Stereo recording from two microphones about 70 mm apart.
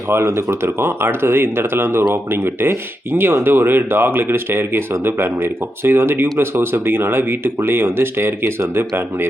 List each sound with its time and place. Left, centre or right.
0.1 s speech: right